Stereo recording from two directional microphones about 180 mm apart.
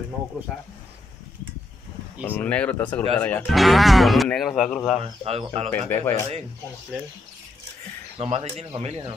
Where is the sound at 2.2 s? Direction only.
10° left (ahead or behind).